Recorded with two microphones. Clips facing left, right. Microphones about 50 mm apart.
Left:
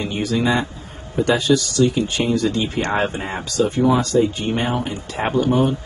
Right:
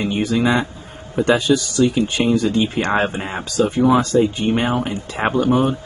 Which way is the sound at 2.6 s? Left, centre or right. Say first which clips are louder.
Right 2 dB; right.